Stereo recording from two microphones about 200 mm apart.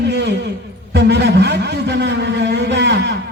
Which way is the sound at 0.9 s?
60° right (ahead or behind).